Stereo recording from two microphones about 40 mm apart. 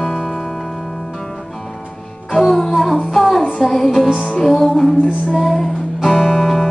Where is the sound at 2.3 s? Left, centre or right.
Centre.